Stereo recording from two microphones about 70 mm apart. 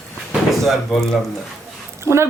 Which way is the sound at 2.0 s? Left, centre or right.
Right.